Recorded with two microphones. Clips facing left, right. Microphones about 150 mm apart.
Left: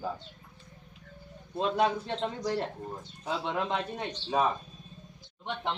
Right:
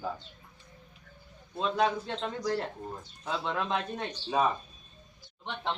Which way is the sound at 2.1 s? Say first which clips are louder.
Even; 25° left (ahead or behind).